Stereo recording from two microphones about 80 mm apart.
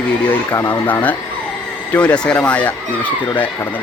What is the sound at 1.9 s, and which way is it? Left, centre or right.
Speech, centre.